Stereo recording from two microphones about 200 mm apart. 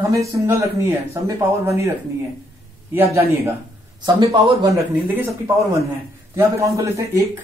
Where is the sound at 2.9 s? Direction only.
15° right (ahead or behind).